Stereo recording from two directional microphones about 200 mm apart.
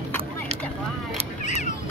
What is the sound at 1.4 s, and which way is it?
Single-lens reflex camera, 35° left (ahead or behind).